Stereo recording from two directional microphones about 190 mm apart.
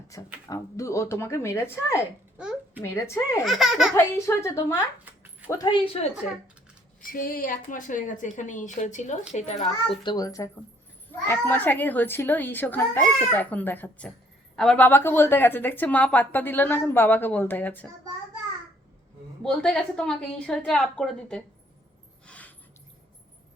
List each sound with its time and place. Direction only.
0.4 s speech: 15° left (ahead or behind)
2.4 s a sound: 5° right (ahead or behind)
2.8 s speech: 15° left (ahead or behind)
3.4 s a woman's voice: centre (ahead or behind)
3.9 s speech: 15° left (ahead or behind)
5.0 s a sound: 10° right (ahead or behind)
5.5 s a woman's voice: 20° left (ahead or behind)
7.0 s speech: 50° left (ahead or behind); by 17.8 s 10° left (ahead or behind)
19.4 s a woman's voice: 5° left (ahead or behind)
22.3 s a sound: 10° left (ahead or behind)